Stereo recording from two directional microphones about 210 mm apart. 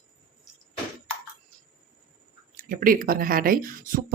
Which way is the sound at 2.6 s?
40° right (ahead or behind).